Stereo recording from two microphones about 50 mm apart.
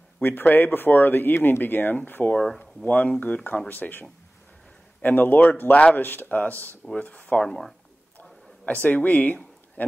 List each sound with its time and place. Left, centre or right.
0.2 s speech: left
2.3 s speech: centre
2.6 s speech: left
5.9 s speech: left
7.0 s speech: left
7.4 s speech: centre
8.2 s a sound: left